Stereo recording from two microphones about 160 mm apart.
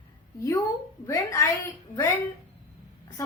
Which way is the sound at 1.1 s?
20° left (ahead or behind).